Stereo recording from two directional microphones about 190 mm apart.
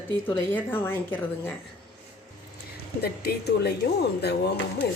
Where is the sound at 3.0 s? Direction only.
55° left (ahead or behind).